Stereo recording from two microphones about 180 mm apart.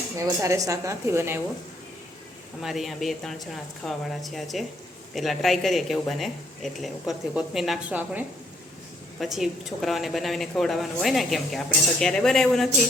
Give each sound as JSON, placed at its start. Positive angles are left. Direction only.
{"t": 0.2, "sound": "a woman's voice", "side_deg": -15}
{"t": 2.6, "sound": "a woman's voice", "side_deg": 0}